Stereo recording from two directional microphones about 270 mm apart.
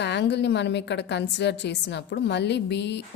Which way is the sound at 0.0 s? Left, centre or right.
Left.